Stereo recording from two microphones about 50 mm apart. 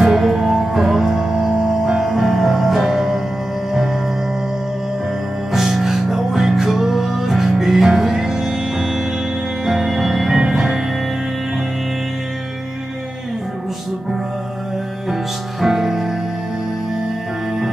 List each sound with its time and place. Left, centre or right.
0.0 s music: centre
5.5 s music: centre
15.6 s music: centre